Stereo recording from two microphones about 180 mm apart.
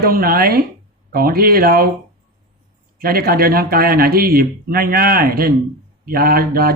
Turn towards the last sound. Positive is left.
turn(degrees=-55)  # may be behind; listen again after turning